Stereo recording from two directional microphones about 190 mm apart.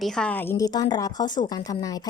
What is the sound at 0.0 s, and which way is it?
A woman's voice, 5° left (ahead or behind).